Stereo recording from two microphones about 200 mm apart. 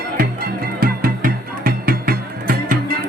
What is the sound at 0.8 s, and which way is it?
Music, 45° right (ahead or behind).